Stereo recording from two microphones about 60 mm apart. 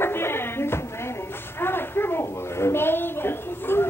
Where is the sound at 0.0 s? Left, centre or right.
Left.